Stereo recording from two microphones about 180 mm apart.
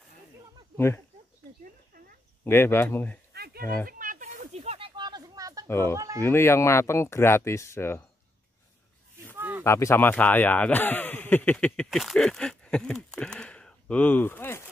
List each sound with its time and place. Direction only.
0.7 s speech: 15° left (ahead or behind)
2.4 s speech: 15° left (ahead or behind)
3.3 s a sound: 60° right (ahead or behind)
4.0 s a sound: 45° right (ahead or behind); by 5.7 s 20° right (ahead or behind)
5.7 s speech: 15° left (ahead or behind)
5.9 s speech: 20° right (ahead or behind)
6.2 s speech: 15° left (ahead or behind)
9.2 s a sound: 10° right (ahead or behind)
9.6 s speech: 15° left (ahead or behind)